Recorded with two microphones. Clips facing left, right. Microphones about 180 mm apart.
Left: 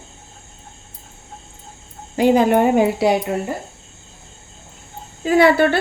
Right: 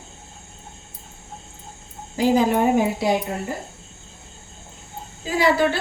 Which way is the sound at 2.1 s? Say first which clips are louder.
Left 4 dB; 60° left (ahead or behind).